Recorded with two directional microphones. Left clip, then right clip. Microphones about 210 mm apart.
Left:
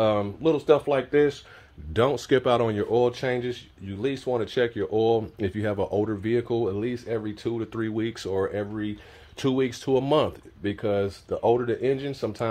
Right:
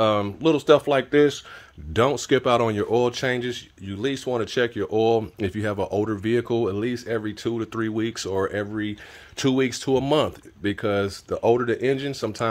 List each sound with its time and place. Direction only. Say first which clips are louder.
0.0 s speech: right 2 dB; 25° right (ahead or behind)
0.4 s speech: right 4 dB; 45° right (ahead or behind)
2.0 s speech: right 2 dB; 25° right (ahead or behind)